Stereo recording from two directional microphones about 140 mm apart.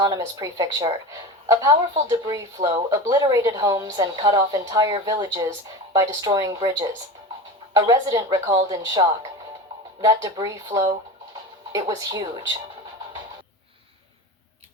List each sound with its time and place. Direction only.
0.0 s speech: 25° right (ahead or behind)
2.0 s speech: 25° right (ahead or behind)